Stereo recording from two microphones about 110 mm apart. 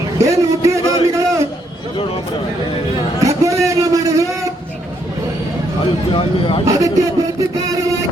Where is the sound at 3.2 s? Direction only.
30° right (ahead or behind).